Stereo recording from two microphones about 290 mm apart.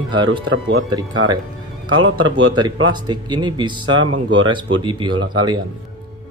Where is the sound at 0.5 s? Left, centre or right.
Right.